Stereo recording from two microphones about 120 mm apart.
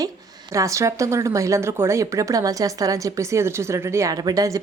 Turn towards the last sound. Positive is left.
turn(degrees=-30)  # may be behind; listen again after turning